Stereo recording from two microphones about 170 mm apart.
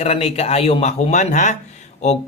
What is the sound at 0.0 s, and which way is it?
Speech, 35° left (ahead or behind).